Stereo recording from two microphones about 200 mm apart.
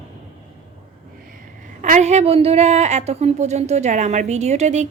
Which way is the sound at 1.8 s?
35° right (ahead or behind).